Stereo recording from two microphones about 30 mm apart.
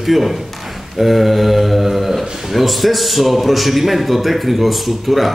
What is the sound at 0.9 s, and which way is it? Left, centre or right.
Mantra, centre.